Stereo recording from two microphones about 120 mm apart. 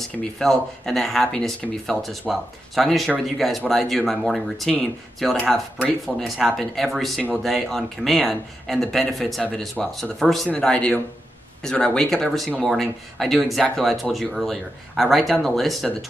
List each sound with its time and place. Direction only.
0.2 s speech: 5° left (ahead or behind)